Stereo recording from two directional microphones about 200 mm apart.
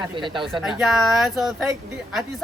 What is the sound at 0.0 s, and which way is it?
Speech, 25° right (ahead or behind).